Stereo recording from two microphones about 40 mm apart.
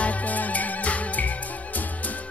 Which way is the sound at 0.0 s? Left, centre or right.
Left.